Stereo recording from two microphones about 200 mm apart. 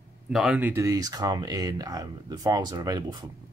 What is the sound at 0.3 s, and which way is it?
Speech, 5° right (ahead or behind).